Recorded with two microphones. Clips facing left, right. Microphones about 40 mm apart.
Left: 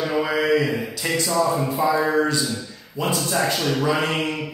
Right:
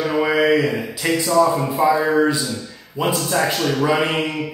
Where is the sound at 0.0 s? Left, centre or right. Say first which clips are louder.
Right 4 dB; centre.